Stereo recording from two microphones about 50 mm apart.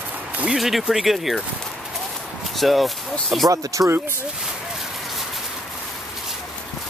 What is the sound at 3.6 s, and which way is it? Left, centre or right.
Speech, right.